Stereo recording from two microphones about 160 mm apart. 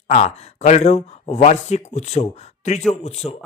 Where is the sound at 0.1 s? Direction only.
45° left (ahead or behind).